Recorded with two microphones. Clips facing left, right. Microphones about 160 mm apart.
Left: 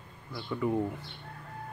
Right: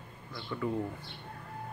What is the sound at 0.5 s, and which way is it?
Speech, 15° left (ahead or behind).